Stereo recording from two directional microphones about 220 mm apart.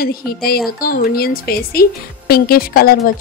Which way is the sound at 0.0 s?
45° left (ahead or behind).